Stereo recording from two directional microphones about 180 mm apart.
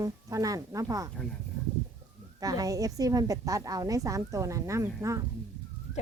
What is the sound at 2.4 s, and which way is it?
A woman's voice, 20° right (ahead or behind).